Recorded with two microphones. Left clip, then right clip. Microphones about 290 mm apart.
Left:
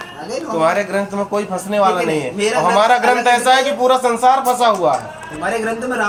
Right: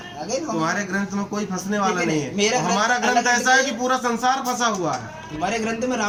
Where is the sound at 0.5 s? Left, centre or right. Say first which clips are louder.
Left 12 dB; right.